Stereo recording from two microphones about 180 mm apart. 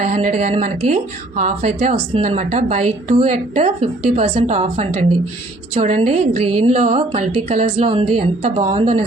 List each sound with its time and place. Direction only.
0.0 s a woman's voice: 40° right (ahead or behind)